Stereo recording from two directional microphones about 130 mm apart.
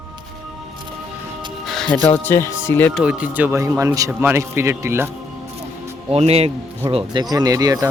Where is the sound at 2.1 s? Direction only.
20° left (ahead or behind).